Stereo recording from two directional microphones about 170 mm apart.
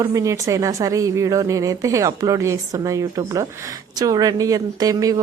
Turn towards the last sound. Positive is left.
turn(degrees=-20)  # may be behind; listen again after turning